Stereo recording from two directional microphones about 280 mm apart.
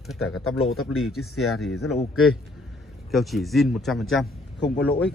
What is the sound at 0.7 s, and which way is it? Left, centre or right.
Speech, left.